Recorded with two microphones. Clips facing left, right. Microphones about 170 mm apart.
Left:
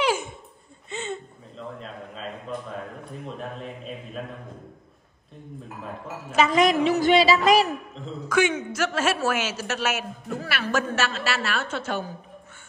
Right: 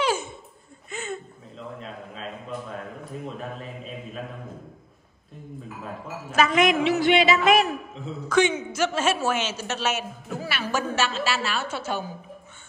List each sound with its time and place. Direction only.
0.0 s a sound: 15° left (ahead or behind)
0.8 s chuckle: 25° left (ahead or behind)
1.8 s a man's voice: centre (ahead or behind)
6.5 s a sound: 40° left (ahead or behind)
7.9 s speech: 5° right (ahead or behind)
8.3 s a woman's voice: 5° left (ahead or behind)